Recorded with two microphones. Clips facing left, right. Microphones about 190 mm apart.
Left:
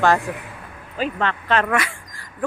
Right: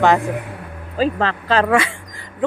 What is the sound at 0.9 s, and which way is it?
Speech, 35° right (ahead or behind).